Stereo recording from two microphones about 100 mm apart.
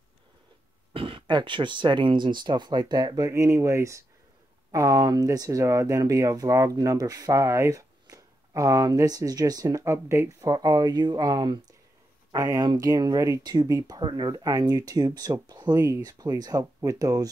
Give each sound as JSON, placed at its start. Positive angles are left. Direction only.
{"t": 0.9, "sound": "speech", "side_deg": -60}
{"t": 3.3, "sound": "speech", "side_deg": -30}
{"t": 14.3, "sound": "speech", "side_deg": -40}